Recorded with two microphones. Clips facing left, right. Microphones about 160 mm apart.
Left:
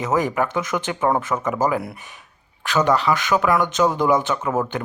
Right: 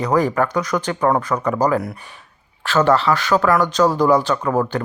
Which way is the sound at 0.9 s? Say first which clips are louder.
Right 2 dB; 10° left (ahead or behind).